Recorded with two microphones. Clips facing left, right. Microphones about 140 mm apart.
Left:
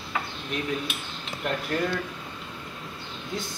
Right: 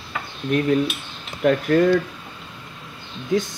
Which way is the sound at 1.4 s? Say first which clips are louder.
Right 12 dB; 90° right.